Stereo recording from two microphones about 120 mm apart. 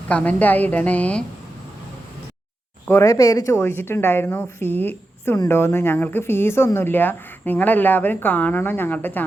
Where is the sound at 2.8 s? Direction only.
20° left (ahead or behind).